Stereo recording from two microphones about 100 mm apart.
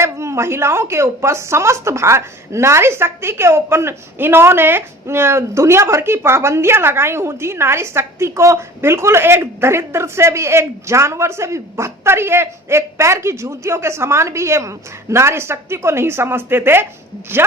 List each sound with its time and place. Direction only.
0.0 s a woman's voice: 30° right (ahead or behind)